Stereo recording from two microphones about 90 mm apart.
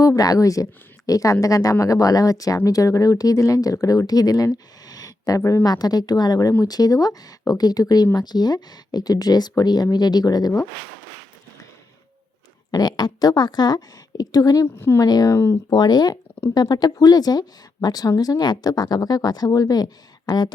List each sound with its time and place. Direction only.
0.2 s speech: 40° left (ahead or behind)
12.7 s speech: 50° left (ahead or behind)
14.8 s speech: 30° left (ahead or behind)
15.0 s speech: 45° left (ahead or behind)